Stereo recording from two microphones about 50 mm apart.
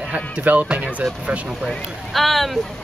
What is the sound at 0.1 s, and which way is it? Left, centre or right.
Speech, right.